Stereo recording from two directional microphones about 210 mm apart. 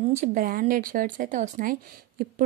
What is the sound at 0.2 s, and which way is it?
A woman's voice, 40° right (ahead or behind).